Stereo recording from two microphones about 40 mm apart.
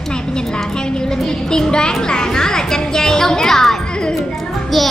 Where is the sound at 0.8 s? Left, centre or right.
Centre.